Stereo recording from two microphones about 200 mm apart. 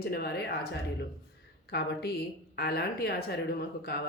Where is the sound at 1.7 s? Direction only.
55° left (ahead or behind).